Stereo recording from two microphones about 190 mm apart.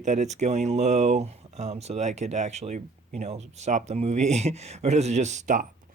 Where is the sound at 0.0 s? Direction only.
40° right (ahead or behind).